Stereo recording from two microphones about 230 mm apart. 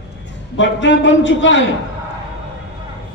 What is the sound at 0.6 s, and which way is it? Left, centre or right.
A man's voice, left.